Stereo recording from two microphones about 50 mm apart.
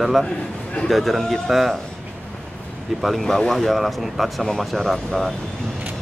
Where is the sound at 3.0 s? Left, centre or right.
Centre.